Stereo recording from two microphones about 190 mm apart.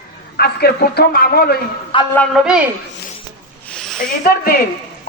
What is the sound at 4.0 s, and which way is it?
Speech, 50° left (ahead or behind).